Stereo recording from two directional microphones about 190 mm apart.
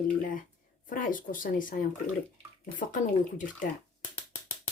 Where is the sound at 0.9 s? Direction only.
45° left (ahead or behind).